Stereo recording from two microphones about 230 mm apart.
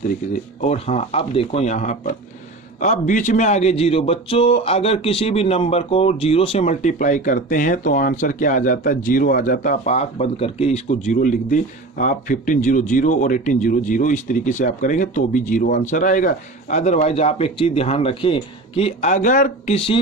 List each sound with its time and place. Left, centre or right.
0.6 s a man's voice: left